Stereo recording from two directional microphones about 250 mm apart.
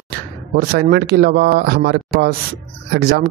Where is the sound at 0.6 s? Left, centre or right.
Right.